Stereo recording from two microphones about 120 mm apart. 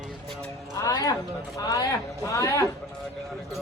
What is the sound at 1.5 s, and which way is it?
Speech, 25° left (ahead or behind).